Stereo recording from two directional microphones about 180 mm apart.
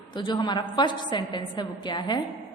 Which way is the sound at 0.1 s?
25° left (ahead or behind).